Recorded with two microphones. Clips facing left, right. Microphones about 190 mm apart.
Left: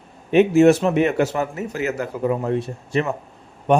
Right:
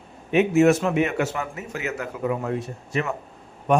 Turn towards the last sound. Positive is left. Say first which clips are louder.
# left 3 dB
turn(degrees=30)  # may be behind; listen again after turning